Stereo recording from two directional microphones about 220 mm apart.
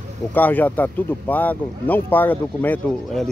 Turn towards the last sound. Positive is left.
turn(degrees=5)  # may be behind; listen again after turning